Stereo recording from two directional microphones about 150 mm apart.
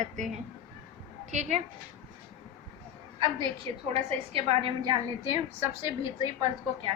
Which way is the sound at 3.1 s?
30° right (ahead or behind).